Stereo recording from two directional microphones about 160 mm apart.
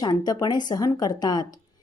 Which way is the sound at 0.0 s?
25° left (ahead or behind).